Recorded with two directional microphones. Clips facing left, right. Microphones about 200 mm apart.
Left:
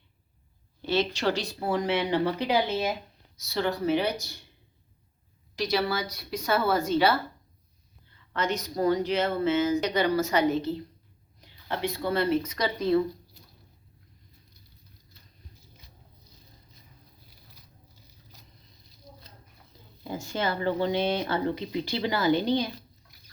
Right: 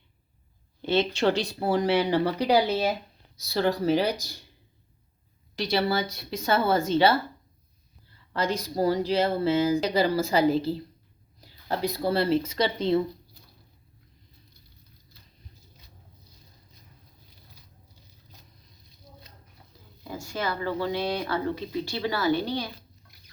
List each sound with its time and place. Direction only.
0.8 s speech: 25° right (ahead or behind)
5.5 s a woman's voice: 30° right (ahead or behind)
20.1 s speech: 25° left (ahead or behind)